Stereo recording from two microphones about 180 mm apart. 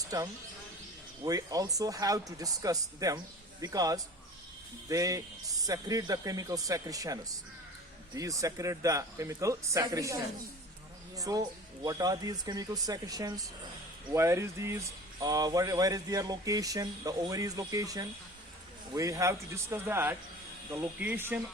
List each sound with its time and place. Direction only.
0.1 s speech: 20° right (ahead or behind)
11.2 s speech: 20° right (ahead or behind)